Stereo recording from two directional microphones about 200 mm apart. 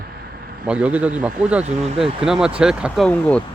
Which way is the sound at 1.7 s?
30° right (ahead or behind).